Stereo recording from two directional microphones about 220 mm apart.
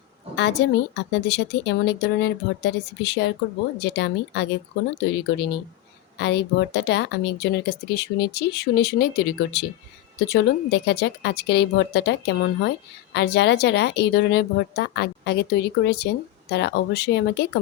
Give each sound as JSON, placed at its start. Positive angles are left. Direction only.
{"t": 0.3, "sound": "speech", "side_deg": 55}